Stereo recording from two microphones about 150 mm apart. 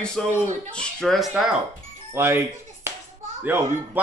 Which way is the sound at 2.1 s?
15° right (ahead or behind).